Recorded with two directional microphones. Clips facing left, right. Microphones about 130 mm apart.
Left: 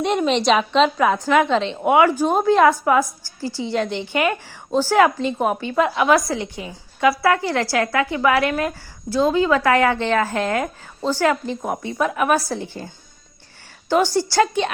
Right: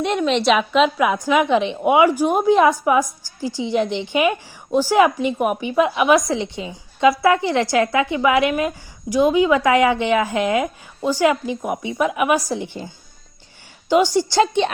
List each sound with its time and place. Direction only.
0.0 s a woman's voice: centre (ahead or behind); by 12.9 s 15° right (ahead or behind)
13.9 s a woman's voice: 15° right (ahead or behind)